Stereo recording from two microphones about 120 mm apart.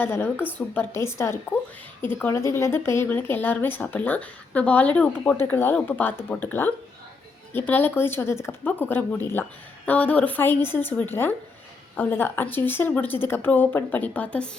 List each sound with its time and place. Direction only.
0.0 s a woman's voice: 20° left (ahead or behind)